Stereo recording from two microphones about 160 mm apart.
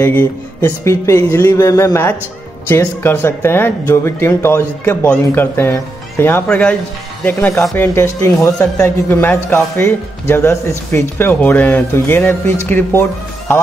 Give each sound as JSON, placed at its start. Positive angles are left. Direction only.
{"t": 0.0, "sound": "speech", "side_deg": 10}